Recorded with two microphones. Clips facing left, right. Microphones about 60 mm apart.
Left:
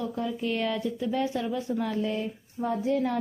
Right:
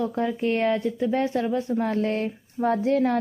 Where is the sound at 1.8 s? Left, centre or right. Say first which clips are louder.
Right 5 dB; right.